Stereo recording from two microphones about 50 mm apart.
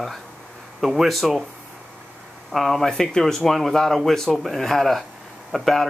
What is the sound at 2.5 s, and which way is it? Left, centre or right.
Speech, centre.